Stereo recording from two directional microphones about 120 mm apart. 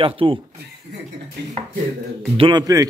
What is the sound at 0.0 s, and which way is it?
Speech, 50° right (ahead or behind).